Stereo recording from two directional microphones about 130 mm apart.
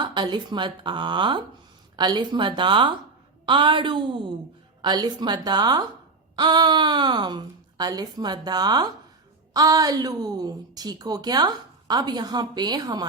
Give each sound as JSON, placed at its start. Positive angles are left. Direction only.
{"t": 0.0, "sound": "a woman's voice", "side_deg": -35}